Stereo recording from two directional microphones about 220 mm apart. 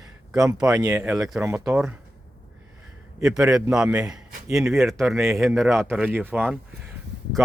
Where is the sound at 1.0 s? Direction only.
Centre (ahead or behind).